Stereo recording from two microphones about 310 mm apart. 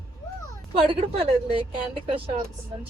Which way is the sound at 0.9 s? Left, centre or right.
Centre.